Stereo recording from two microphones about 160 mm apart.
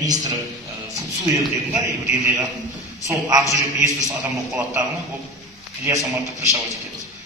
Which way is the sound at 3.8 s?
5° right (ahead or behind).